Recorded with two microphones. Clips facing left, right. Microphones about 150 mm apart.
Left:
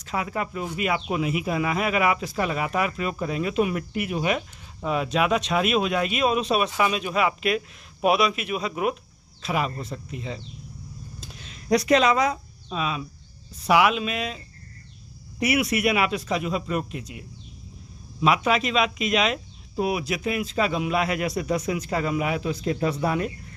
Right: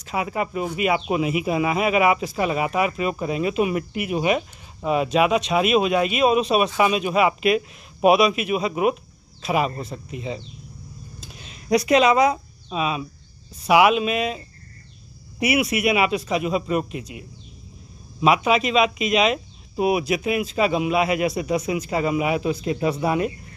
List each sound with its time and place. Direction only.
0.0 s speech: 10° right (ahead or behind)
15.4 s speech: 5° right (ahead or behind)
18.2 s speech: 10° right (ahead or behind)